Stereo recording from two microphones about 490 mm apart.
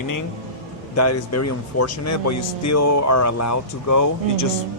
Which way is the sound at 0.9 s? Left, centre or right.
Left.